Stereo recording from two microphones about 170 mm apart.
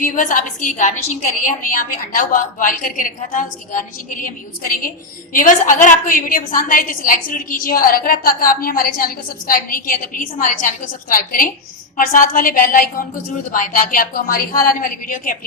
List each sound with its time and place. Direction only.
0.0 s a woman's voice: 50° left (ahead or behind)
5.3 s a woman's voice: 50° left (ahead or behind)